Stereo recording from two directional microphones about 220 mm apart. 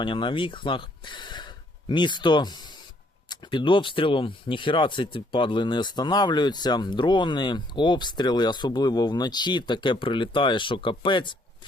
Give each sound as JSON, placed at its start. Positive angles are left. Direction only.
{"t": 0.0, "sound": "speech", "side_deg": 20}